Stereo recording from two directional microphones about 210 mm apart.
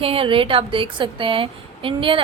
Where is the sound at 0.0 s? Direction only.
25° right (ahead or behind).